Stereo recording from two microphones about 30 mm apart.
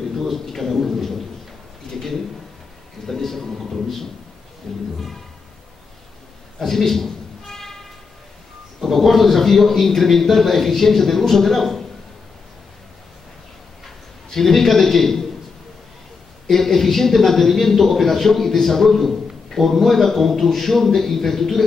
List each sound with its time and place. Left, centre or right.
0.1 s a sound: centre
0.5 s a man's voice: centre
1.8 s a sound: centre
3.1 s a man's voice: centre
4.7 s a man's voice: centre
6.6 s a sound: centre
8.8 s a man's voice: centre
13.8 s a man's voice: centre
16.4 s a man's voice: centre